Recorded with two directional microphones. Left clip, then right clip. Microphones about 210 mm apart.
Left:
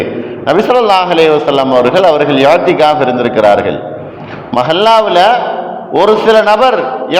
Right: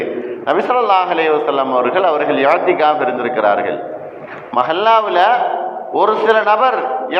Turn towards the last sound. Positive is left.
turn(degrees=55)  # may be behind; listen again after turning